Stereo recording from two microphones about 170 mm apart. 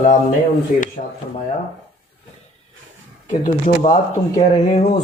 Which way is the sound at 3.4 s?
45° left (ahead or behind).